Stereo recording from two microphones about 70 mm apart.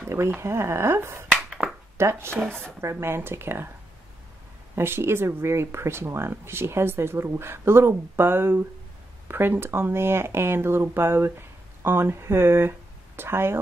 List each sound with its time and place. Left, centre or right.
0.4 s speech: right
4.7 s speech: right